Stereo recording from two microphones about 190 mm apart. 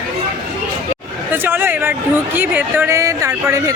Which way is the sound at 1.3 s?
10° right (ahead or behind).